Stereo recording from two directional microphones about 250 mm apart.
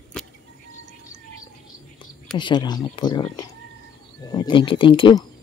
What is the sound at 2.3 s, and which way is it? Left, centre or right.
Speech, centre.